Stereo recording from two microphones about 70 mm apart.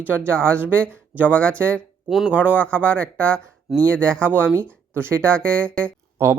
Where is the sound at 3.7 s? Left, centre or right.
Centre.